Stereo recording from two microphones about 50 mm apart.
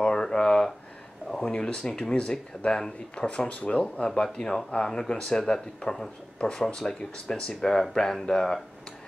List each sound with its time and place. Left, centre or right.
0.0 s a sound: centre
1.3 s speech: centre
4.1 s speech: centre